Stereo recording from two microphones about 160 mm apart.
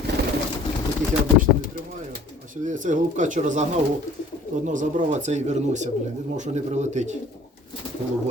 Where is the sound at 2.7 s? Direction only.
55° right (ahead or behind).